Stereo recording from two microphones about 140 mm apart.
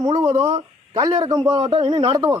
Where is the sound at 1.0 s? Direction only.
30° right (ahead or behind).